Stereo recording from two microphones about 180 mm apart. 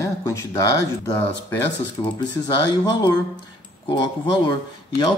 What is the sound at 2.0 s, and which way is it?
Speech, 30° left (ahead or behind).